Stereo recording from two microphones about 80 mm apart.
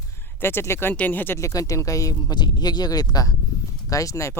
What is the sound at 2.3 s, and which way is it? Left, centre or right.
Speech, left.